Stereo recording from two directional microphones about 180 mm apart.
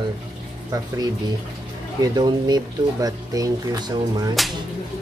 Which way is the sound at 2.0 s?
25° right (ahead or behind).